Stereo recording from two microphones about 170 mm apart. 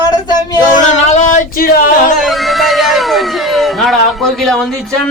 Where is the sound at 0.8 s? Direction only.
45° left (ahead or behind).